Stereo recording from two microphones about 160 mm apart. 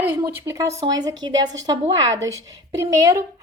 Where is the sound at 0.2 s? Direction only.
20° right (ahead or behind).